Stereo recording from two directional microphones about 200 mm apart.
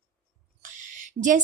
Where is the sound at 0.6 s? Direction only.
40° right (ahead or behind).